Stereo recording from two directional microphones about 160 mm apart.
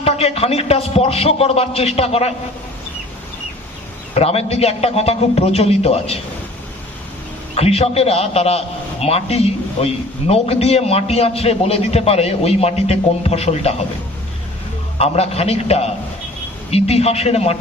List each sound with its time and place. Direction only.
0.0 s a man's voice: 40° left (ahead or behind)
4.1 s a man's voice: 40° left (ahead or behind)
7.5 s a man's voice: 40° left (ahead or behind)
14.9 s a man's voice: 40° left (ahead or behind)